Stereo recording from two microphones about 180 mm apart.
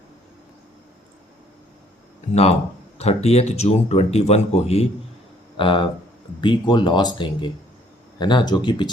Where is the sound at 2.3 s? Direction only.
35° left (ahead or behind).